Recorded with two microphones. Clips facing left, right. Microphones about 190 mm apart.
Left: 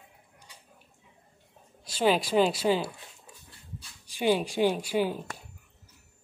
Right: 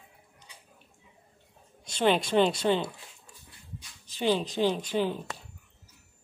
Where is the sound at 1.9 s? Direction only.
5° left (ahead or behind).